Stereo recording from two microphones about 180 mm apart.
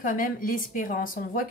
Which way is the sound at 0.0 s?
50° left (ahead or behind).